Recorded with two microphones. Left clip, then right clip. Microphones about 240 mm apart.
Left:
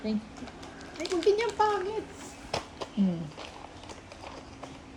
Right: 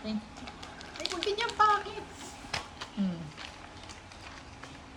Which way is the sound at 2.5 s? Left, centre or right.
Centre.